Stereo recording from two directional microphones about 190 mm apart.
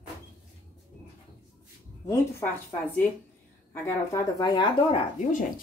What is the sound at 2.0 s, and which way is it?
Speech, 15° left (ahead or behind).